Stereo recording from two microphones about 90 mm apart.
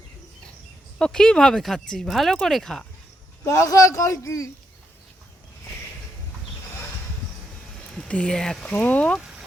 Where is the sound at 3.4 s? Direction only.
35° left (ahead or behind).